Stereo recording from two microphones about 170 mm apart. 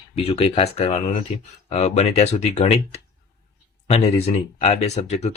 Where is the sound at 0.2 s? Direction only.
35° left (ahead or behind).